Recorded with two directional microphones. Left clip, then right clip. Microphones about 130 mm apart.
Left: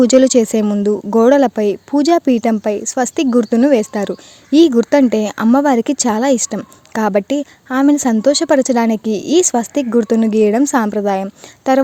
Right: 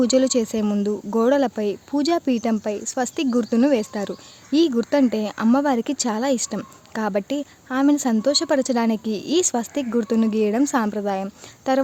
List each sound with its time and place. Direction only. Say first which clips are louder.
0.0 s speech: left 9 dB; 50° left (ahead or behind)
0.6 s speech: left 8 dB; 40° left (ahead or behind)